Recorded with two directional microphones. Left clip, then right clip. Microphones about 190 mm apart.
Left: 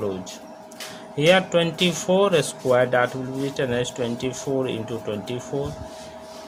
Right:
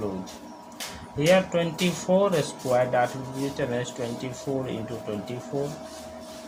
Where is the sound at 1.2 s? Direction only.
40° left (ahead or behind).